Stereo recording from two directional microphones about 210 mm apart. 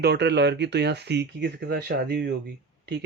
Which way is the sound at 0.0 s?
55° right (ahead or behind).